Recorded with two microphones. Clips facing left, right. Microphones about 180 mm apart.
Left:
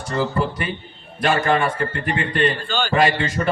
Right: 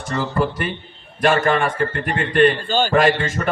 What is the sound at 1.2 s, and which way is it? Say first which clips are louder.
A man's voice: right 2 dB; 55° right (ahead or behind).